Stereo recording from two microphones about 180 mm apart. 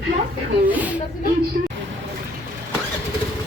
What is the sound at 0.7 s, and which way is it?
Speech, 10° right (ahead or behind).